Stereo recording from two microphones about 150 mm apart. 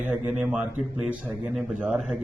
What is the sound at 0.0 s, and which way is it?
A man's voice, 10° right (ahead or behind).